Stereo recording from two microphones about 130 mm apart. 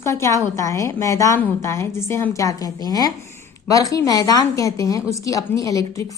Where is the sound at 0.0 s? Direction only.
20° left (ahead or behind).